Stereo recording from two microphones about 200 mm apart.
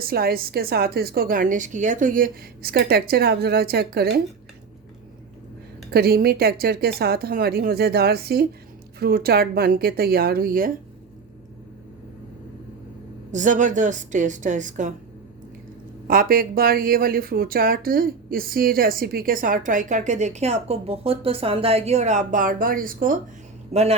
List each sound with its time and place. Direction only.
0.0 s speech: 50° right (ahead or behind)
5.9 s speech: 50° right (ahead or behind)
13.3 s a woman's voice: 40° right (ahead or behind)
16.0 s speech: 45° right (ahead or behind)
23.7 s a woman's voice: 30° right (ahead or behind)